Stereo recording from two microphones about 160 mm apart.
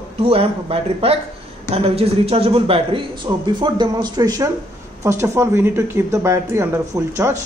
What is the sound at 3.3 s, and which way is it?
Speech, 25° right (ahead or behind).